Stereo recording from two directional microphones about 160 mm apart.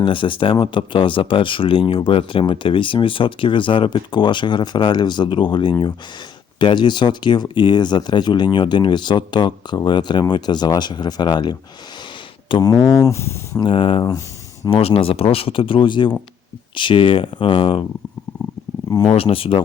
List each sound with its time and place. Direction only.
0.0 s speech: 30° left (ahead or behind); by 13.7 s 15° left (ahead or behind)
13.7 s speech: 35° left (ahead or behind)
19.0 s speech: 35° left (ahead or behind)